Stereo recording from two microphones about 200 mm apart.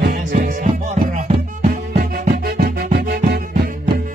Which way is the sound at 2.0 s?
50° right (ahead or behind).